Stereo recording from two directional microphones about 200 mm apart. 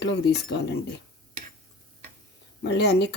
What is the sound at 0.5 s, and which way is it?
Speech, 60° left (ahead or behind).